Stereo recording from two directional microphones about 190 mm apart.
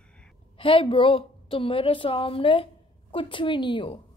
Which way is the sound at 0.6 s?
30° left (ahead or behind).